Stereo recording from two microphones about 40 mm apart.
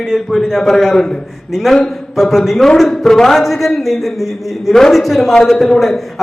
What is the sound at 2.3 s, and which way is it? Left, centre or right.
A man's voice, centre.